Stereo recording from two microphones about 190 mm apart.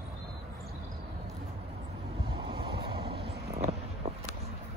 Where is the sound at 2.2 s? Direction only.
25° right (ahead or behind).